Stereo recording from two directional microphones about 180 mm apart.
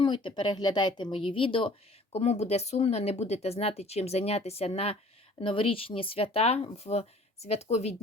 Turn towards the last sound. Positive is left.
turn(degrees=35)  # may be behind; listen again after turning